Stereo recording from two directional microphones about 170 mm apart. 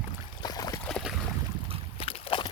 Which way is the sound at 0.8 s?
5° left (ahead or behind).